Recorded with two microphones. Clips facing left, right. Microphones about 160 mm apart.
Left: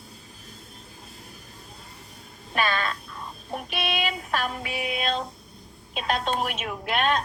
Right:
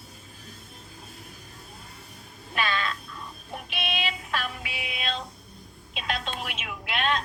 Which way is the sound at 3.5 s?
45° left (ahead or behind).